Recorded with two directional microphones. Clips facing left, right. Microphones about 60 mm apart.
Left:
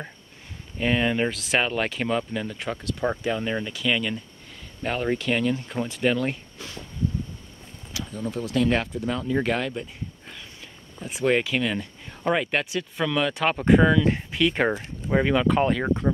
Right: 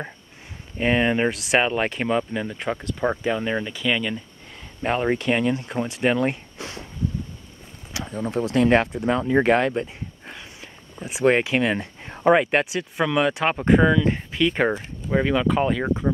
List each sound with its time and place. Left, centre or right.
0.7 s speech: right
4.8 s speech: right
6.0 s speech: right
7.9 s speech: right
10.3 s a sound: centre
11.2 s speech: right; by 16.1 s centre